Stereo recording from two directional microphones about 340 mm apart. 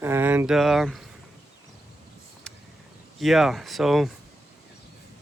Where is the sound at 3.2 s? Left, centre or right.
Centre.